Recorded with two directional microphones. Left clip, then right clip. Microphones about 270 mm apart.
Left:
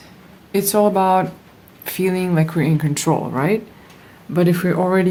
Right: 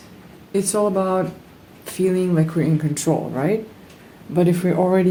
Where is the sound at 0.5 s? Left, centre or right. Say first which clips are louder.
Left 4 dB; left.